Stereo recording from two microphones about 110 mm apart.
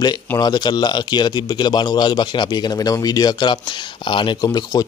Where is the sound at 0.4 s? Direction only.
40° left (ahead or behind).